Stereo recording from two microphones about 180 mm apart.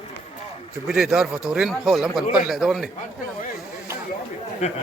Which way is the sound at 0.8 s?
5° right (ahead or behind).